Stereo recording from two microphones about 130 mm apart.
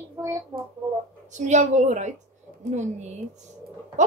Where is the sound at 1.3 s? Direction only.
65° right (ahead or behind).